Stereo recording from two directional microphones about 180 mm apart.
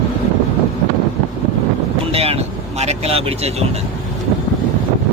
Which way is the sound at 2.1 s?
35° right (ahead or behind).